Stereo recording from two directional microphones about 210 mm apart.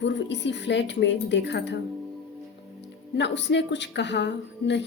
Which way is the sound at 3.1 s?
55° left (ahead or behind).